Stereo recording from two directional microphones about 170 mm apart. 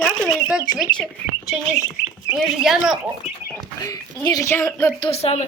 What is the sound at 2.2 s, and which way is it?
Speech, 5° right (ahead or behind).